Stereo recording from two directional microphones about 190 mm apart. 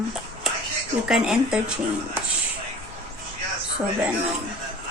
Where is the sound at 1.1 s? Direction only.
5° right (ahead or behind).